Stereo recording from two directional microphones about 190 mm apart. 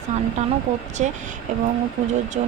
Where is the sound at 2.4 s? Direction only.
40° right (ahead or behind).